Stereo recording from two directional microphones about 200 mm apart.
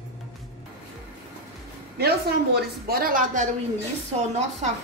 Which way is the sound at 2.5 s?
50° right (ahead or behind).